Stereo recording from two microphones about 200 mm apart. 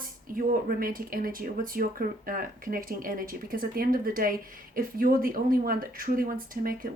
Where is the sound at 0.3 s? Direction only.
45° right (ahead or behind).